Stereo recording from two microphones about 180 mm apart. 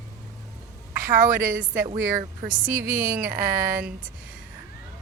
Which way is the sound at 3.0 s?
15° right (ahead or behind).